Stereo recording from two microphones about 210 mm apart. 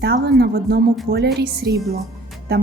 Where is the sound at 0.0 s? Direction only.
50° right (ahead or behind).